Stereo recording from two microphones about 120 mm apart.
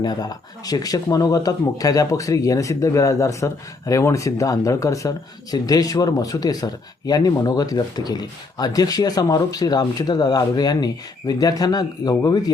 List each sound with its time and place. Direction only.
0.0 s speech: 35° left (ahead or behind)